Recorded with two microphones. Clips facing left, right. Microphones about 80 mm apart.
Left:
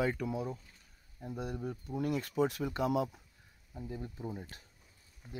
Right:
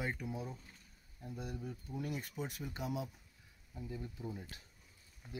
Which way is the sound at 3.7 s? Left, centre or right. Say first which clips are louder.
Left 3 dB; left.